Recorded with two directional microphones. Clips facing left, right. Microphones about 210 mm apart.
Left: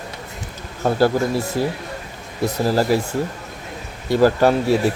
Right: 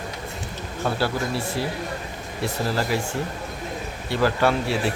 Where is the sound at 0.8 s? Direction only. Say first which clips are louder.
Left 8 dB; 45° left (ahead or behind).